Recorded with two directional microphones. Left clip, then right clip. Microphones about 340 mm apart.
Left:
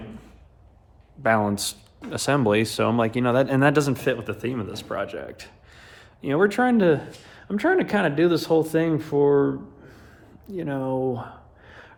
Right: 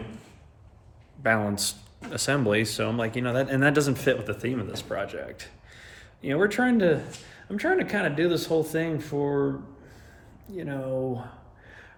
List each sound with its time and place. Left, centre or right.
1.2 s speech: centre